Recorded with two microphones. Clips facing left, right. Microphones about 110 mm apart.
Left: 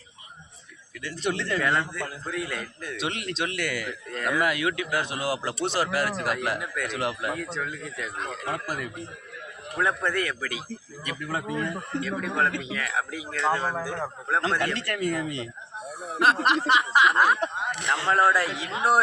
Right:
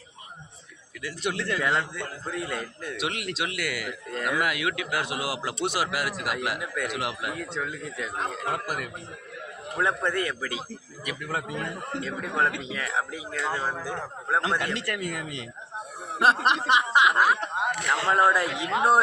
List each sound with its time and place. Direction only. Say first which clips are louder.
1.0 s speech: left 1 dB; 5° right (ahead or behind)
2.2 s a man's voice: right 2 dB; 25° right (ahead or behind)
2.9 s speech: left 1 dB; 5° right (ahead or behind)
7.9 s a man's voice: right 5 dB; 25° right (ahead or behind)
11.0 s speech: even; 10° right (ahead or behind)
11.9 s a man's voice: left 1 dB; 20° right (ahead or behind)
13.3 s speech: left 4 dB; 5° right (ahead or behind)
16.1 s a man's voice: even; 25° right (ahead or behind)
17.2 s speech: left 1 dB; 5° right (ahead or behind)
17.5 s speech: right 3 dB; 50° right (ahead or behind)
18.1 s a man's voice: even; 20° right (ahead or behind)